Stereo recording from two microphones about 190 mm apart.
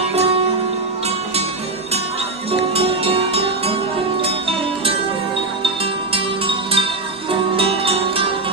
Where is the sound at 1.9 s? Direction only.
30° right (ahead or behind).